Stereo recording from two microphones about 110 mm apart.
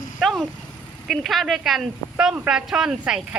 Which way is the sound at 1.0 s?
5° right (ahead or behind).